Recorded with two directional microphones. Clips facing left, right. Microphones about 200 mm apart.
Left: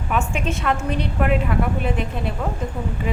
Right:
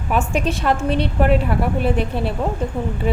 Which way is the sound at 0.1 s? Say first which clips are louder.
Right 4 dB; 35° right (ahead or behind).